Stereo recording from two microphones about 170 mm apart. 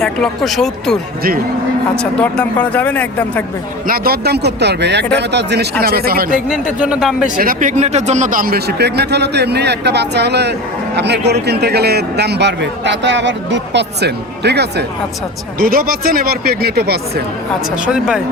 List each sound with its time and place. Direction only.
0.0 s speech: centre (ahead or behind)
2.0 s speech: 5° left (ahead or behind)
3.8 s a man's voice: 60° right (ahead or behind); by 5.6 s 85° right
5.8 s speech: 65° right (ahead or behind)
6.5 s speech: 5° right (ahead or behind)
7.3 s a man's voice: 50° right (ahead or behind); by 14.8 s 75° right (ahead or behind)
15.5 s speech: 60° right (ahead or behind)
17.7 s speech: 5° right (ahead or behind)